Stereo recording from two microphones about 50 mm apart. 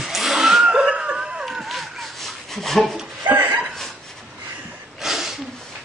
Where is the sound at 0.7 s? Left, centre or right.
Right.